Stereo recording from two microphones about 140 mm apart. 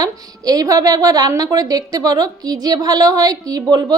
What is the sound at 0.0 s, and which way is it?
A woman's voice, 25° right (ahead or behind).